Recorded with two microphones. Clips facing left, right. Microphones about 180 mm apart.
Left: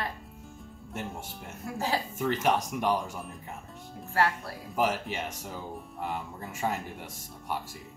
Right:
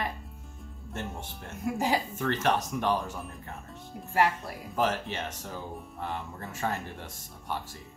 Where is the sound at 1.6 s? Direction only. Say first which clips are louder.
Right 3 dB; 15° right (ahead or behind).